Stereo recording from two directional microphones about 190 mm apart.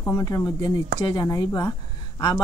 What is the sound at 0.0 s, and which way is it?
Speech, 15° left (ahead or behind).